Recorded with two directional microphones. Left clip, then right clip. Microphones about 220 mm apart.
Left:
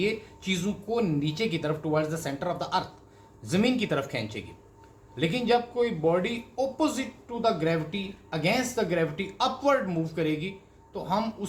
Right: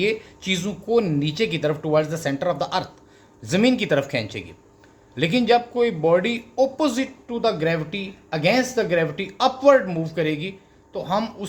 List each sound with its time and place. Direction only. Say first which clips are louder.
0.0 s a woman's voice: right 6 dB; 50° right (ahead or behind)